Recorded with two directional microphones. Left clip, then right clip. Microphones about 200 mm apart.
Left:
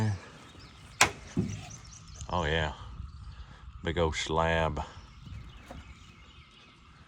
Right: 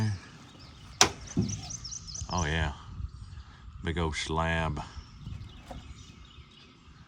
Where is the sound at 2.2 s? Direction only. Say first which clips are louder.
Left 2 dB; 20° right (ahead or behind).